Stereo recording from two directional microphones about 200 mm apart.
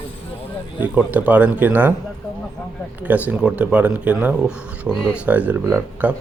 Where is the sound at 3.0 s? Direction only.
10° right (ahead or behind).